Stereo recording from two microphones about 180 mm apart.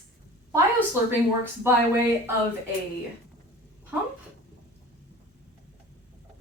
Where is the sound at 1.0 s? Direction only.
10° right (ahead or behind).